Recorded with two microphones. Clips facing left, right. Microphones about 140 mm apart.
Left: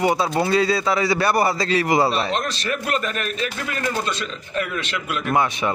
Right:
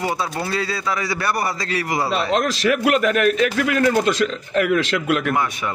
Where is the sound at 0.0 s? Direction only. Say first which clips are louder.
Left 4 dB; 20° left (ahead or behind).